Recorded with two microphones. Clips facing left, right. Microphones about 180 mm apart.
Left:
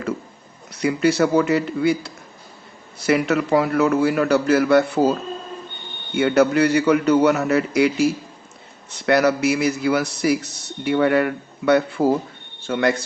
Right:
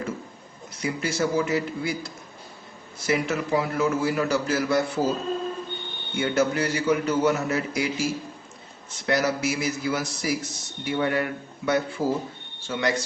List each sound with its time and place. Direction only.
0.8 s a man's voice: 65° left (ahead or behind)
6.1 s a man's voice: 65° left (ahead or behind)